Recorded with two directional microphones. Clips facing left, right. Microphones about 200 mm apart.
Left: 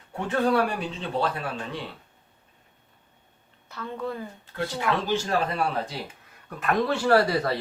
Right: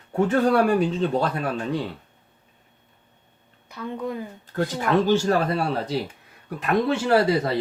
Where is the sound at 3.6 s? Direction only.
15° right (ahead or behind).